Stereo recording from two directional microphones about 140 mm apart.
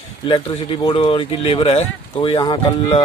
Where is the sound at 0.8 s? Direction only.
40° left (ahead or behind).